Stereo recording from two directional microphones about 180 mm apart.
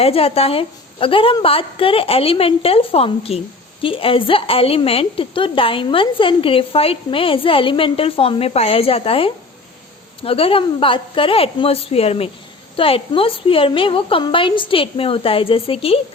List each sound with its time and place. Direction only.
0.0 s a woman's voice: 30° left (ahead or behind)